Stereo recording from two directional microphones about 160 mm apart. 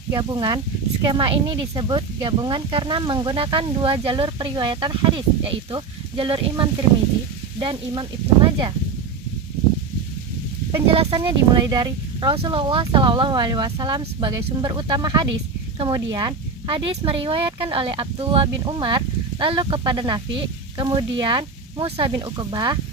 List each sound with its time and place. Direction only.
0.1 s speech: 25° right (ahead or behind)
10.8 s speech: 35° right (ahead or behind)